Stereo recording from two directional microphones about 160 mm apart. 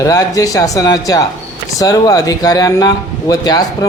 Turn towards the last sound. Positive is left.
turn(degrees=25)  # may be behind; listen again after turning